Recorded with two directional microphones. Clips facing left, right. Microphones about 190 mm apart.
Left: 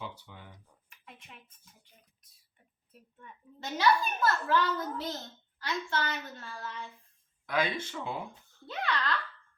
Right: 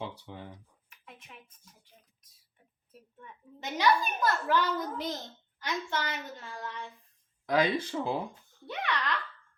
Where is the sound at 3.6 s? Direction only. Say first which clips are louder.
Even; 15° right (ahead or behind).